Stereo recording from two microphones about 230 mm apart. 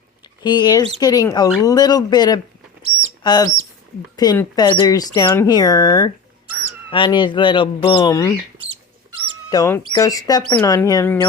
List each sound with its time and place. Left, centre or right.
0.4 s speech: centre
9.5 s speech: centre